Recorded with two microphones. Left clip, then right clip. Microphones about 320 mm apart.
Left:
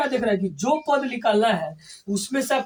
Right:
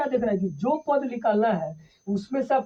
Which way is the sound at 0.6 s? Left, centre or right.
Right.